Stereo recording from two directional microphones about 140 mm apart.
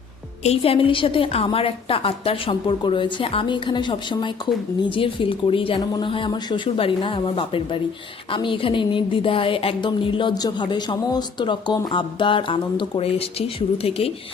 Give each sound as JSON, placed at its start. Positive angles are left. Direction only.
{"t": 0.4, "sound": "a woman's voice", "side_deg": 45}